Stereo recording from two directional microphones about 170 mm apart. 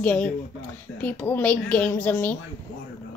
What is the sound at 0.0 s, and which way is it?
Speech, 5° left (ahead or behind).